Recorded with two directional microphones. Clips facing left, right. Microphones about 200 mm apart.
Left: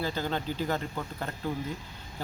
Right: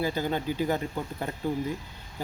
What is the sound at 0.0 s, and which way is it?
Speech, 10° right (ahead or behind).